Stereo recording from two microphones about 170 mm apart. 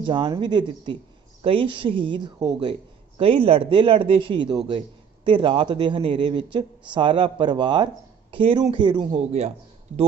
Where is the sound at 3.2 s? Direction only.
30° right (ahead or behind).